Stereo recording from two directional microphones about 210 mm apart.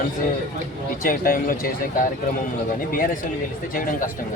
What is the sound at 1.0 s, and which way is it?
Speech, 40° left (ahead or behind).